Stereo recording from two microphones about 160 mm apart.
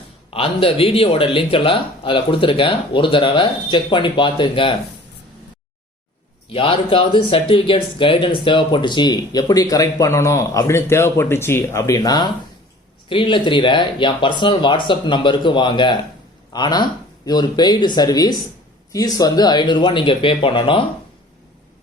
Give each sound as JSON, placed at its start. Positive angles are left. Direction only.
{"t": 0.3, "sound": "speech", "side_deg": 35}
{"t": 6.5, "sound": "speech", "side_deg": 35}